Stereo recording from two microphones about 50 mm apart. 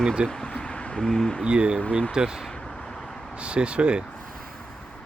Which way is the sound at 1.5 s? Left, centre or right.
Centre.